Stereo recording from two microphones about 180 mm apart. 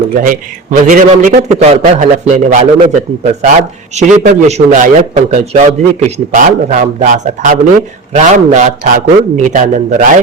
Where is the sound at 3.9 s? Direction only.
40° right (ahead or behind).